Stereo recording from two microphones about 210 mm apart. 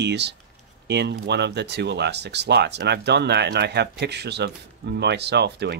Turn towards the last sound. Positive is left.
turn(degrees=-55)  # may be behind; listen again after turning